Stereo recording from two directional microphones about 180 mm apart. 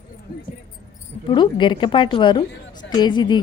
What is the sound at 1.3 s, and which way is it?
A woman's voice, 25° left (ahead or behind).